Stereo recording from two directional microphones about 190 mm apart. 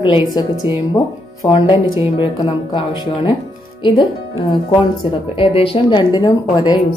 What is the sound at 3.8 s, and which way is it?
Speech, 25° left (ahead or behind).